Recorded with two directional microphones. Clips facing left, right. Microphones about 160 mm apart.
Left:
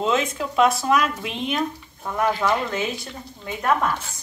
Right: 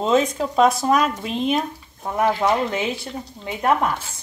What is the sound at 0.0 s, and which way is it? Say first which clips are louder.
Speech: right 4 dB; 40° right (ahead or behind).